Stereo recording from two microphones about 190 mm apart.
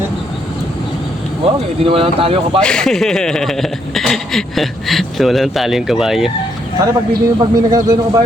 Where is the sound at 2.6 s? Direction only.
5° left (ahead or behind).